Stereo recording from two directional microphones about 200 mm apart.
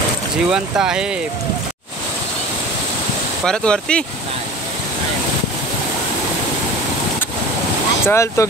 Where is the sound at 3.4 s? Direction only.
5° left (ahead or behind).